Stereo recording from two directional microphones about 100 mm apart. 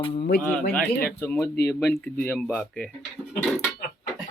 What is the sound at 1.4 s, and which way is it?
Speech, 25° left (ahead or behind).